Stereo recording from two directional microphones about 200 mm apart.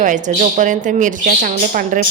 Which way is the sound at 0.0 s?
40° right (ahead or behind).